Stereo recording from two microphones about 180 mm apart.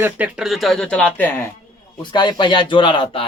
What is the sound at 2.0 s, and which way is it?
Speech, 25° left (ahead or behind).